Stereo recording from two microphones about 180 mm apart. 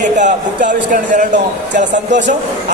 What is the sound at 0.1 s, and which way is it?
A man's voice, 45° right (ahead or behind).